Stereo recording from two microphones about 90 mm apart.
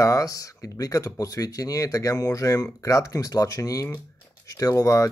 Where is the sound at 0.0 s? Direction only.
40° left (ahead or behind).